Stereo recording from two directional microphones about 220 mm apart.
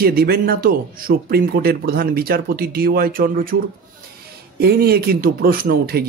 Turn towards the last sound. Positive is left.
turn(degrees=-45)  # may be behind; listen again after turning